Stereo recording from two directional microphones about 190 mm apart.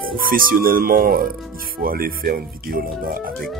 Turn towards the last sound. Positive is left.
turn(degrees=-50)  # may be behind; listen again after turning